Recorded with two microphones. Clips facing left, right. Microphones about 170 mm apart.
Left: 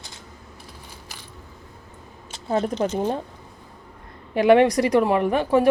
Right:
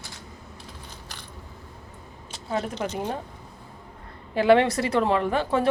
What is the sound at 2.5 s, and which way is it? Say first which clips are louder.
Speech: left 6 dB; 30° left (ahead or behind).